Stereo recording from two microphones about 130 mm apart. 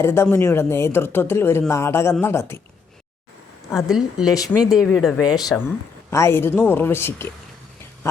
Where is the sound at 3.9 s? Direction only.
5° right (ahead or behind).